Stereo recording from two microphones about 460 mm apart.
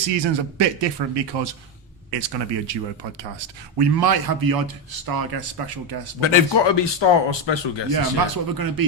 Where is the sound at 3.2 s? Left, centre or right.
Right.